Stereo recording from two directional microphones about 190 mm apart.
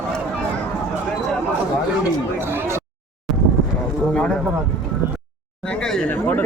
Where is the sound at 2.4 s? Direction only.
10° right (ahead or behind).